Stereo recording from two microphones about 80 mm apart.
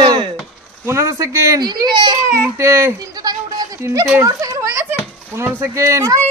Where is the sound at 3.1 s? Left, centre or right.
Right.